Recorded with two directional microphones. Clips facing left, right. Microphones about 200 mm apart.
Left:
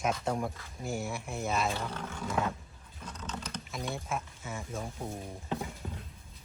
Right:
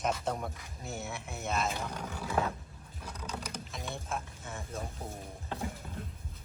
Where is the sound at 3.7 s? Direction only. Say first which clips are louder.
Left 4 dB; centre (ahead or behind).